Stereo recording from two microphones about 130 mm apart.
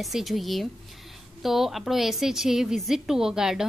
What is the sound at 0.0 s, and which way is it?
A woman's voice, centre (ahead or behind).